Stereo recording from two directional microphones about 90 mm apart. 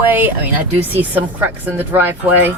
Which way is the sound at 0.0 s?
20° right (ahead or behind).